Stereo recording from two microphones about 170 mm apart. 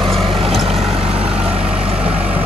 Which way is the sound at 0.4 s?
35° right (ahead or behind).